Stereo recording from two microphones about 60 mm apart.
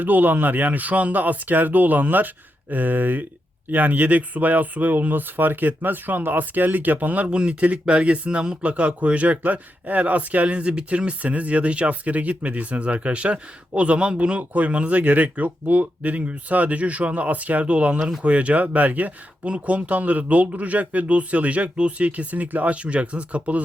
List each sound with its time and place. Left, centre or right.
0.0 s speech: right